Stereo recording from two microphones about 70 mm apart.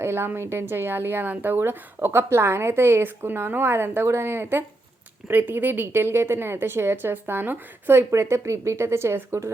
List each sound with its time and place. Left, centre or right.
0.0 s a woman's voice: right
8.1 s a woman's voice: right